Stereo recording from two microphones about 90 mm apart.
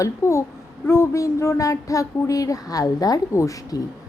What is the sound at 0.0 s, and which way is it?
Speech, 35° left (ahead or behind).